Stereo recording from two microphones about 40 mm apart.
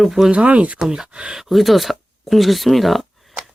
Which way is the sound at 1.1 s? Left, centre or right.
Right.